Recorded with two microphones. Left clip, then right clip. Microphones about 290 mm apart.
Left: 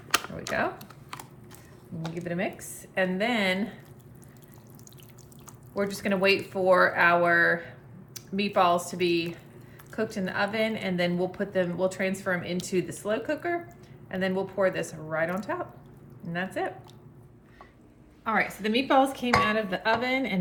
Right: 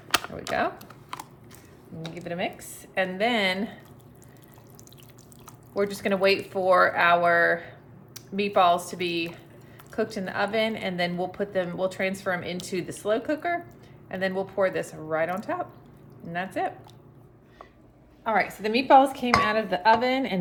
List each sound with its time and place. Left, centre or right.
0.1 s a sound: centre
2.1 s a woman's voice: centre
5.7 s a woman's voice: centre
18.2 s speech: centre